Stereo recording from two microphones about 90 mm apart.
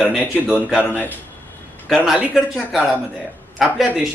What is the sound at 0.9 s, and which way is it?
Speech, 20° left (ahead or behind).